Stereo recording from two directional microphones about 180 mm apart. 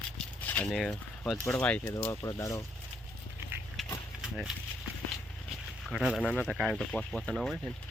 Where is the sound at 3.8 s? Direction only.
Centre (ahead or behind).